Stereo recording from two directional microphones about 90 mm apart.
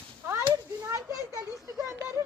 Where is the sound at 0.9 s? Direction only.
40° right (ahead or behind).